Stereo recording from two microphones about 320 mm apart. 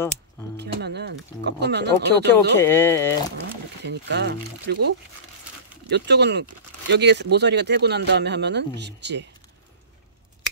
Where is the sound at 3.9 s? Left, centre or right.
Right.